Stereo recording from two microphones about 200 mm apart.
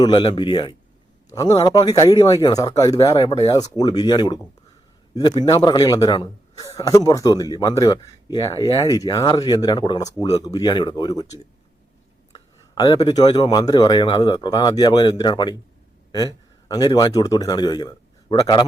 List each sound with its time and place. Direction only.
0.0 s a man's voice: 25° left (ahead or behind)